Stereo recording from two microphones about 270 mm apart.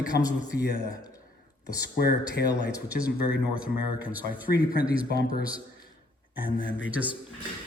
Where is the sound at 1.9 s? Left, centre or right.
Left.